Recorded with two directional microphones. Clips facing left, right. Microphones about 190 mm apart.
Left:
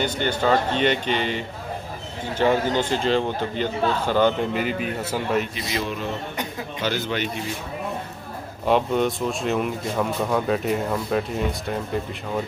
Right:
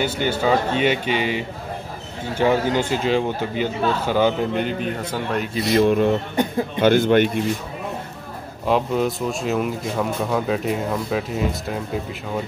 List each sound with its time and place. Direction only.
0.0 s a man's voice: 10° right (ahead or behind)
4.6 s speech: 5° left (ahead or behind)
5.7 s speech: 55° right (ahead or behind)
8.6 s speech: centre (ahead or behind)